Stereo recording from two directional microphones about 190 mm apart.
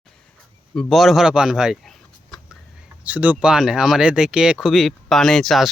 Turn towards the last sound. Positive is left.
turn(degrees=0)  # may be behind; listen again after turning